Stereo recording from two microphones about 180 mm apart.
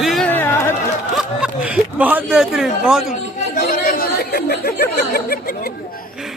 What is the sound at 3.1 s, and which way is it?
Chatter, 45° left (ahead or behind).